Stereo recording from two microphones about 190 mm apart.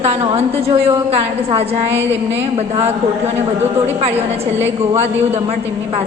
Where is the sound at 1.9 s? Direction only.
10° right (ahead or behind).